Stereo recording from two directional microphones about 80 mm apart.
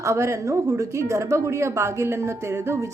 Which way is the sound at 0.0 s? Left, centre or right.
Right.